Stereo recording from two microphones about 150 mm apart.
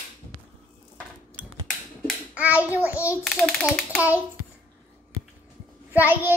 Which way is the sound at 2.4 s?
10° right (ahead or behind).